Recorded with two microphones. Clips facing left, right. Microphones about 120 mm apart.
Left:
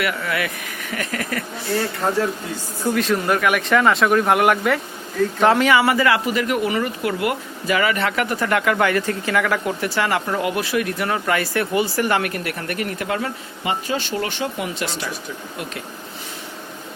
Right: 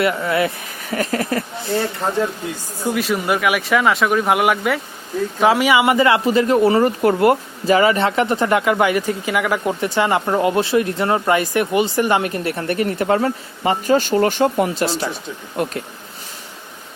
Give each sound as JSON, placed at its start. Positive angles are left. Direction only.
{"t": 0.0, "sound": "speech", "side_deg": -25}
{"t": 2.8, "sound": "speech", "side_deg": -5}